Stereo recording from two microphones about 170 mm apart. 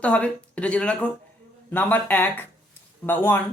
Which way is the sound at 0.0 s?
10° left (ahead or behind).